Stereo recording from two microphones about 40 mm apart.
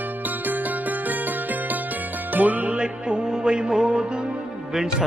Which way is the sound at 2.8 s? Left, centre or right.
Right.